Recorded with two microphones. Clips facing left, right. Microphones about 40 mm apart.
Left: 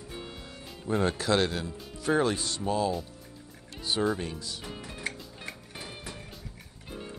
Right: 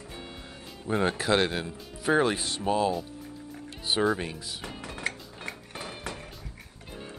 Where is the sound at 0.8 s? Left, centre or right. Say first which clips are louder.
Right 1 dB; centre.